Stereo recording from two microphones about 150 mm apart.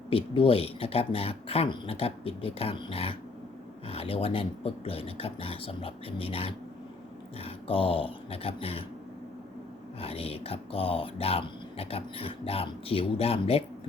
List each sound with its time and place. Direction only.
0.1 s speech: 40° left (ahead or behind)
10.0 s speech: 40° left (ahead or behind)